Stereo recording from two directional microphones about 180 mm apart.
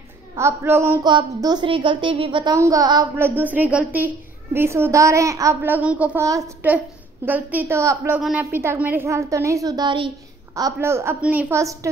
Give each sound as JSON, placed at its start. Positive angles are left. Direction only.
{"t": 0.4, "sound": "a woman's voice", "side_deg": -15}
{"t": 8.2, "sound": "a woman's voice", "side_deg": -5}